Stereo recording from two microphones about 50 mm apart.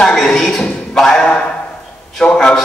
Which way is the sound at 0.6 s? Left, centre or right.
Centre.